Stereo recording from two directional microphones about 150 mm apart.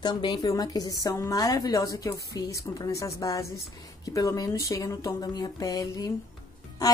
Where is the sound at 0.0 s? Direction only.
30° left (ahead or behind).